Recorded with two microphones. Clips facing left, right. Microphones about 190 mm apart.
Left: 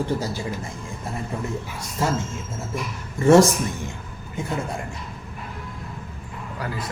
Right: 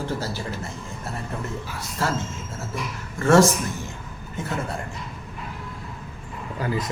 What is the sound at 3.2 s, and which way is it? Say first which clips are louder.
Speech: left 2 dB; 15° left (ahead or behind).